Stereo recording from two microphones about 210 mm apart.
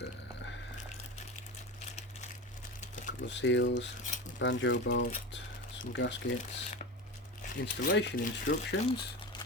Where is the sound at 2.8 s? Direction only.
40° left (ahead or behind).